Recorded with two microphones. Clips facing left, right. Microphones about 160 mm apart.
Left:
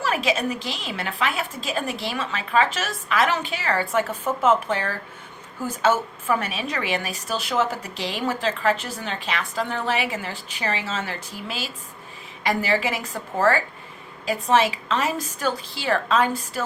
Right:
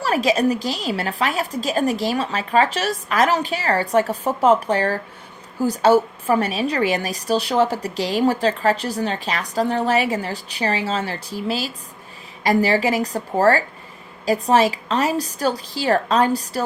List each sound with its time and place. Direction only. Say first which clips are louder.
0.0 s a woman's voice: right 5 dB; 40° right (ahead or behind)